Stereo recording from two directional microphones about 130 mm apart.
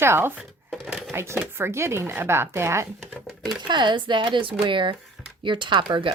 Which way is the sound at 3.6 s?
35° right (ahead or behind).